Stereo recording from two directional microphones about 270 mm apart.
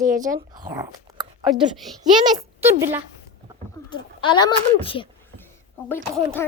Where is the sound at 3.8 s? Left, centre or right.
Centre.